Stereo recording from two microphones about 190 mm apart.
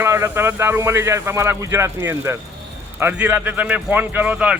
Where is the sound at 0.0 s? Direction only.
15° right (ahead or behind).